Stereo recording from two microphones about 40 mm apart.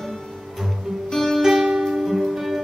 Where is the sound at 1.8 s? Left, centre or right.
Centre.